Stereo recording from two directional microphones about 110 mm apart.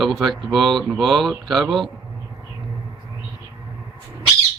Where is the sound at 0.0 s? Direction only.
Centre (ahead or behind).